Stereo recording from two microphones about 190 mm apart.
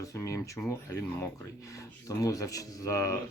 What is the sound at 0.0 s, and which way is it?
Speech, 15° left (ahead or behind).